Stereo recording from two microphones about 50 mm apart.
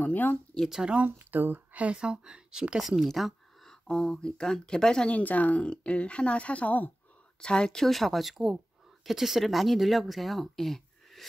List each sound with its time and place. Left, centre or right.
0.0 s speech: left
0.7 s speech: centre
1.3 s speech: right
2.0 s speech: centre
3.0 s a sound: centre
3.8 s speech: centre
5.0 s speech: left
7.3 s speech: centre
7.8 s speech: centre